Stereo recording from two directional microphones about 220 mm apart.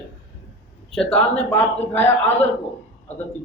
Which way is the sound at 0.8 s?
5° left (ahead or behind).